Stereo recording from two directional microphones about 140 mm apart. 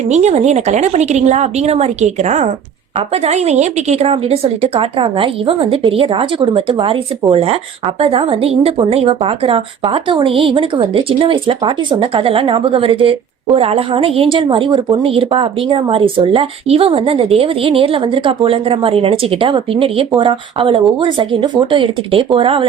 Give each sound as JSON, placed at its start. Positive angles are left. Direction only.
{"t": 0.1, "sound": "a woman's voice", "side_deg": -55}